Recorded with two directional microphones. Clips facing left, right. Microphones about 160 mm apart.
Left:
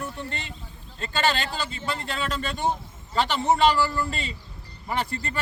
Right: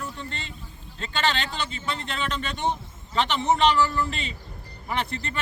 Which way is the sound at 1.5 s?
40° left (ahead or behind).